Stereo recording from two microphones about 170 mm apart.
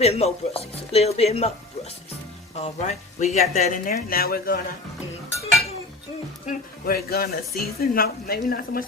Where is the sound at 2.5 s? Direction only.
40° left (ahead or behind); by 4.6 s 60° left (ahead or behind).